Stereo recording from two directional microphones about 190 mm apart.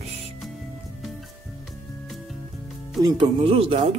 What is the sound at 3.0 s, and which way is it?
Speech, 20° right (ahead or behind).